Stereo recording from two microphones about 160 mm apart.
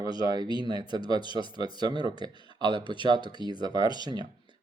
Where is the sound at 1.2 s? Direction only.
30° left (ahead or behind).